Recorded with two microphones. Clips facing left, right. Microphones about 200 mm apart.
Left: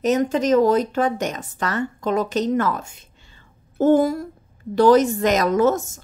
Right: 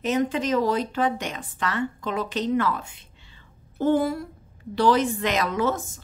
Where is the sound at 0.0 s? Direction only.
40° left (ahead or behind).